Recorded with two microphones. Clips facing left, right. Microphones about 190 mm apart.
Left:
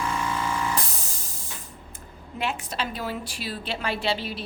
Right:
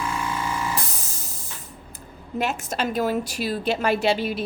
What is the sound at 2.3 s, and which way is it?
A woman's voice, 45° right (ahead or behind).